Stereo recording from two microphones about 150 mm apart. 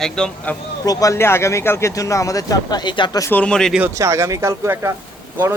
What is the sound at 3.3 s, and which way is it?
Speech, 5° left (ahead or behind).